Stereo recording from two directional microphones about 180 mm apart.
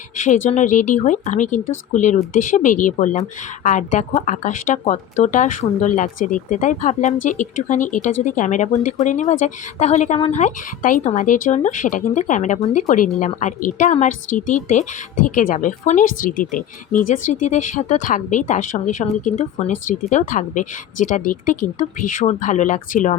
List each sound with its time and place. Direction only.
0.3 s a woman's voice: 45° left (ahead or behind)